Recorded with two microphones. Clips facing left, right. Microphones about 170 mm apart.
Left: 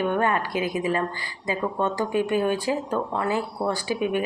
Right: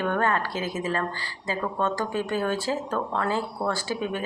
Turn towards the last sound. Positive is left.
turn(degrees=15)  # may be behind; listen again after turning